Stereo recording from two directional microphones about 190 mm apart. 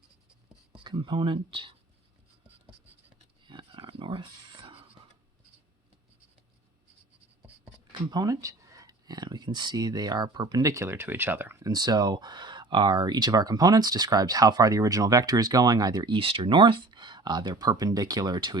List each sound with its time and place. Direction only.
0.9 s speech: 25° right (ahead or behind)
3.4 s a sound: 25° right (ahead or behind)
8.1 s speech: 20° right (ahead or behind)